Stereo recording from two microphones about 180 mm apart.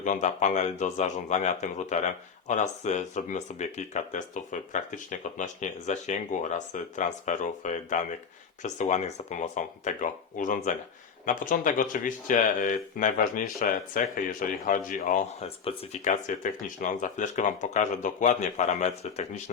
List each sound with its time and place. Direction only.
0.0 s speech: 45° left (ahead or behind)
15.4 s speech: 35° left (ahead or behind)